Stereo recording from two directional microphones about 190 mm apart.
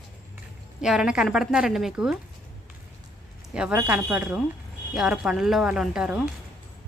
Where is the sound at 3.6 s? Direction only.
5° right (ahead or behind).